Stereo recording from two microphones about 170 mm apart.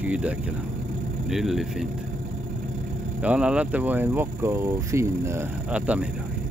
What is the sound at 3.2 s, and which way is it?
Speech, 5° right (ahead or behind).